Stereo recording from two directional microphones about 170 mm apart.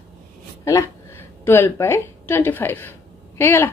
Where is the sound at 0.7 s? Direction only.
15° left (ahead or behind).